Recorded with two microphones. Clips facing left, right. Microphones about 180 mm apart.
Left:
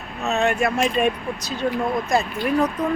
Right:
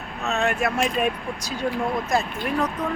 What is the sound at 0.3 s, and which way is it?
Speech, centre (ahead or behind).